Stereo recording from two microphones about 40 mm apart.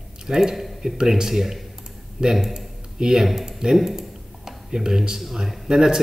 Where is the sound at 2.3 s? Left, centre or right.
Centre.